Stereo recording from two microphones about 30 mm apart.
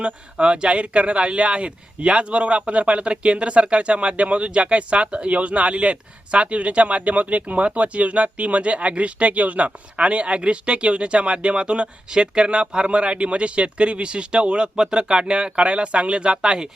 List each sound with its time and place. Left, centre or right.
0.0 s speech: right